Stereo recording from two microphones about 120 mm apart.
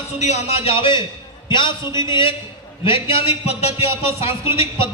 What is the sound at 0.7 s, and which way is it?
A man's voice, 45° left (ahead or behind).